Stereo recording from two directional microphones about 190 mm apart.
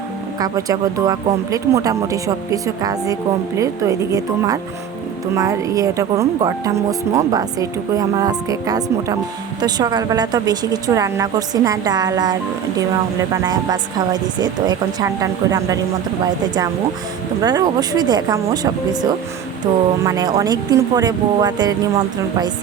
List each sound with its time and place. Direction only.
0.3 s a woman's voice: 20° right (ahead or behind)
17.4 s a woman's voice: 20° right (ahead or behind)